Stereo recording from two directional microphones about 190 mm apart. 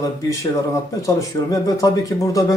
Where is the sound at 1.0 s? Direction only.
20° left (ahead or behind).